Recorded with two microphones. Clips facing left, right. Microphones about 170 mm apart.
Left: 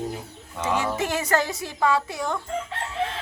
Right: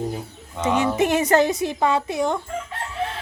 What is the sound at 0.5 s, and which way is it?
A woman's voice, 20° right (ahead or behind).